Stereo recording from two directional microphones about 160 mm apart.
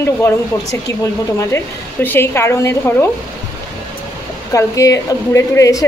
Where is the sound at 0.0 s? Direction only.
15° left (ahead or behind).